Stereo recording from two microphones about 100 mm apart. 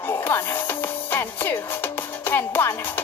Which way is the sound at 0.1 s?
20° left (ahead or behind).